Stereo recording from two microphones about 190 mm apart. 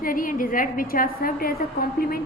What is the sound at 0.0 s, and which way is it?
A woman's voice, 45° left (ahead or behind).